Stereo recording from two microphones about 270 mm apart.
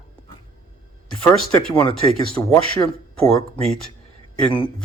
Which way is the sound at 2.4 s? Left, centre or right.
Centre.